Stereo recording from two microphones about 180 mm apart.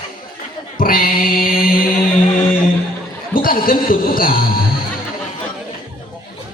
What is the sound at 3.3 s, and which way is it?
Speech, 50° left (ahead or behind).